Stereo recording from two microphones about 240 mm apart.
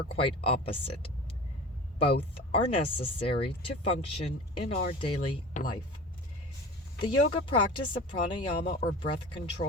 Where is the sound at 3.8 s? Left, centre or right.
Left.